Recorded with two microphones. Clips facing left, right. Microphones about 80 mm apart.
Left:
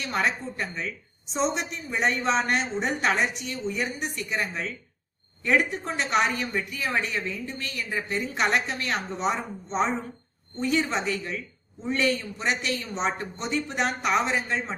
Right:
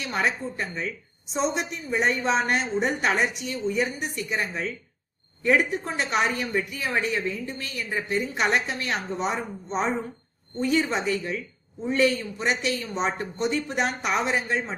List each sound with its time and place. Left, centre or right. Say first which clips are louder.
0.0 s a woman's voice: right 1 dB; centre